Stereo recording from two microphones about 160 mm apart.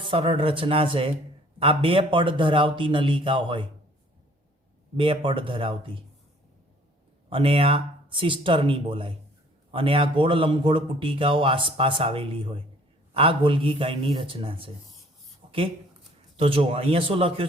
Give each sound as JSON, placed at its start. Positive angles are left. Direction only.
{"t": 0.1, "sound": "speech", "side_deg": -35}
{"t": 4.9, "sound": "speech", "side_deg": -30}
{"t": 7.3, "sound": "speech", "side_deg": -35}
{"t": 16.4, "sound": "speech", "side_deg": -35}